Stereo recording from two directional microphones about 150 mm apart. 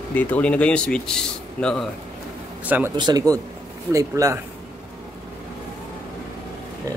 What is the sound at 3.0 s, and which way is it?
Speech, 25° right (ahead or behind).